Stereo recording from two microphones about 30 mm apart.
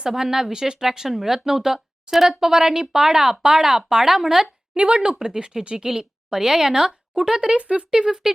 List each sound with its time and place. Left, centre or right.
0.1 s a woman's voice: centre
4.8 s a woman's voice: right
7.5 s speech: right
7.9 s speech: centre